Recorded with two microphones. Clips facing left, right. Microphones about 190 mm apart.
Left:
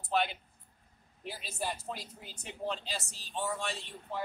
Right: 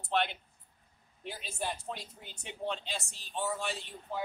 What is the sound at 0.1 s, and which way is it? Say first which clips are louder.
Speech: even; 5° left (ahead or behind).